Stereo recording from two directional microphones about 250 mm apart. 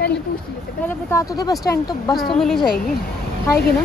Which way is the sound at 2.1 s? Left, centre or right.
Centre.